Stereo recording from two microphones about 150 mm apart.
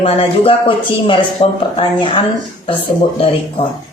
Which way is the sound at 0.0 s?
40° left (ahead or behind).